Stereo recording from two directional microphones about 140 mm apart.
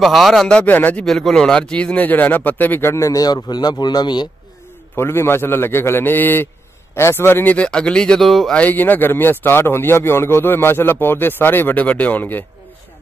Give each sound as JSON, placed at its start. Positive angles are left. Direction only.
{"t": 0.0, "sound": "speech", "side_deg": 0}
{"t": 1.0, "sound": "speech", "side_deg": 0}
{"t": 4.9, "sound": "speech", "side_deg": 15}